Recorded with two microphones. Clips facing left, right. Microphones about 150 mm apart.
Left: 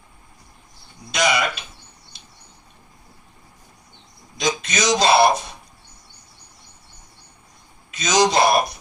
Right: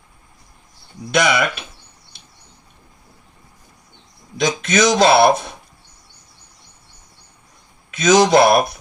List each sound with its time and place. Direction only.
1.1 s speech: 55° right (ahead or behind)
4.4 s speech: 55° right (ahead or behind)
7.9 s speech: 55° right (ahead or behind)